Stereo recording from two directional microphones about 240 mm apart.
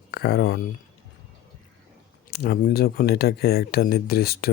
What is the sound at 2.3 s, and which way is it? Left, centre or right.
Speech, left.